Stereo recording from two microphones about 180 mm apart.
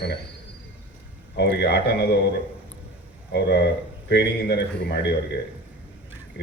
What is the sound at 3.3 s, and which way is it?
A man's voice, 70° left (ahead or behind).